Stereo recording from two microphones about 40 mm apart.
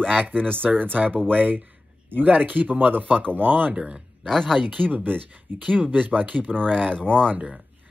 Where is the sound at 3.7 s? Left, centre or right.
Right.